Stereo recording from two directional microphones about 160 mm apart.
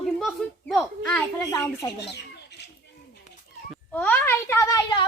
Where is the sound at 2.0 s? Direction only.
90° left.